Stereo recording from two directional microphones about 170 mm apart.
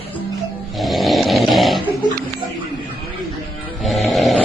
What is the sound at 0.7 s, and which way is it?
Snoring, centre (ahead or behind).